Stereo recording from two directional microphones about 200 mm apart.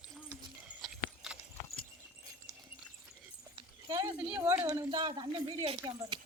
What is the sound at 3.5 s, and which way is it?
Horse, 20° right (ahead or behind).